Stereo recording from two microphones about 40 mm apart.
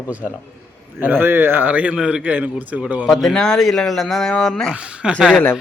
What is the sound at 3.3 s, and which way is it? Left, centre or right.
Speech, left.